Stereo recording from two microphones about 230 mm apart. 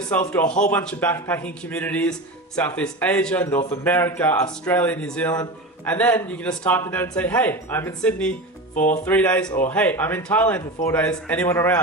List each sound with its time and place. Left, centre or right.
0.0 s speech: centre
8.7 s speech: left
9.0 s speech: centre